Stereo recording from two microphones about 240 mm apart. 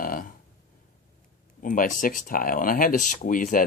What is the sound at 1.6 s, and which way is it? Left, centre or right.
Speech, left.